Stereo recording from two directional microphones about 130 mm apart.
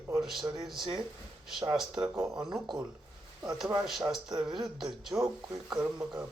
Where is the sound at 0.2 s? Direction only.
Centre (ahead or behind).